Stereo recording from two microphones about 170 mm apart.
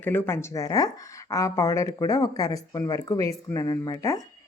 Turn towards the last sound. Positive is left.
turn(degrees=20)  # may be behind; listen again after turning